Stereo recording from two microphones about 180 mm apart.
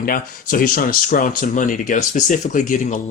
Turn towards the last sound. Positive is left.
turn(degrees=45)  # may be behind; listen again after turning